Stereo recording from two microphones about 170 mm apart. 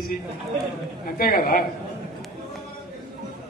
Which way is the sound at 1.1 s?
60° left (ahead or behind).